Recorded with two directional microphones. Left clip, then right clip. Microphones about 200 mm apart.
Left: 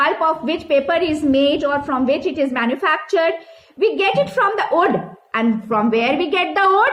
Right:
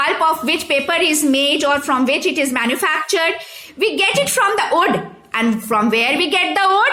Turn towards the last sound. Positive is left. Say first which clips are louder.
# even
turn(degrees=-20)  # may be behind; listen again after turning